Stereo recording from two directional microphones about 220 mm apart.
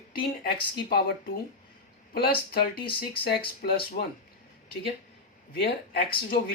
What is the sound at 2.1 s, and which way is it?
Speech, 45° left (ahead or behind).